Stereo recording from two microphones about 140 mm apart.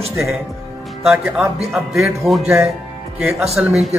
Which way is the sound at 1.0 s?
Centre (ahead or behind).